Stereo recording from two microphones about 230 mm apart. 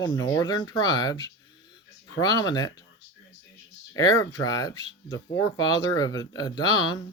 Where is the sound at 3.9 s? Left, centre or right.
Centre.